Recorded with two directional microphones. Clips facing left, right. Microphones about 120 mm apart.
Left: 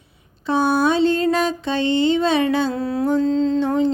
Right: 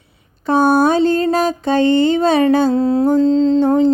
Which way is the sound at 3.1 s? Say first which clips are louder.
Right 3 dB; 35° right (ahead or behind).